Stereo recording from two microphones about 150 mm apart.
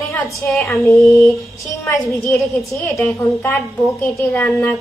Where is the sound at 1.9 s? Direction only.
20° left (ahead or behind).